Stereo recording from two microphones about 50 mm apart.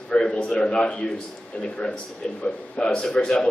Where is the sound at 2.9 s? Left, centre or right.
Centre.